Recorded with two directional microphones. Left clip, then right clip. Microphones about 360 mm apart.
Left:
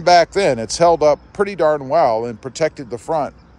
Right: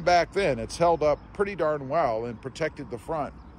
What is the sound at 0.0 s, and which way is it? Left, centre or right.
Speech, centre.